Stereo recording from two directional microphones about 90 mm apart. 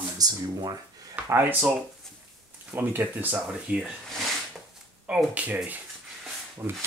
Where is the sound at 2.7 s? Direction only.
20° right (ahead or behind).